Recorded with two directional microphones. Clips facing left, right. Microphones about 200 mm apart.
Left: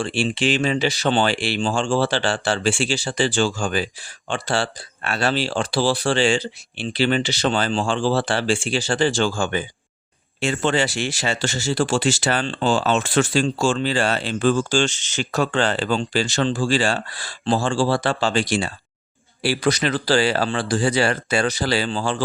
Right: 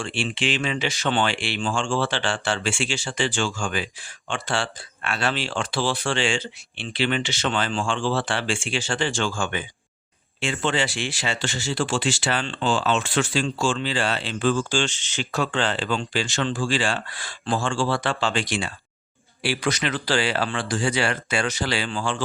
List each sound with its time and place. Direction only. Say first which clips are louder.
0.0 s speech: left 5 dB; 40° left (ahead or behind)